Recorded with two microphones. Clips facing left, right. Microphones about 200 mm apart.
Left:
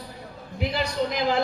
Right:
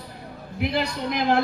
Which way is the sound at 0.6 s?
60° right (ahead or behind).